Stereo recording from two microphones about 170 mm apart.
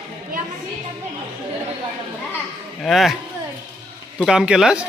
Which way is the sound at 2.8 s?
Centre (ahead or behind).